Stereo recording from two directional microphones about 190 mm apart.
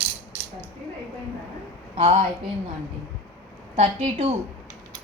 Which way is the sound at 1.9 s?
30° right (ahead or behind).